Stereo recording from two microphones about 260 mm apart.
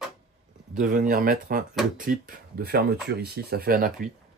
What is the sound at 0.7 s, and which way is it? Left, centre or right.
Speech, right.